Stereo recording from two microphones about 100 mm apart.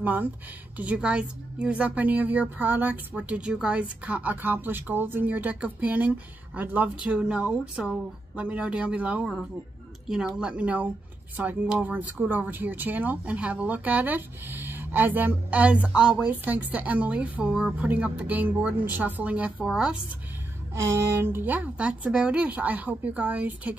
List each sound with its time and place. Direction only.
0.0 s speech: 20° right (ahead or behind)
20.7 s speech: 30° right (ahead or behind)